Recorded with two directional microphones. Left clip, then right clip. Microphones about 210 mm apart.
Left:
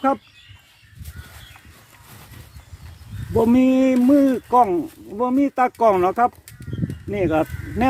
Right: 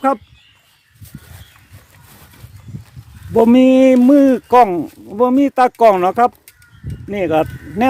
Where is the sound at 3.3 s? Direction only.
35° right (ahead or behind).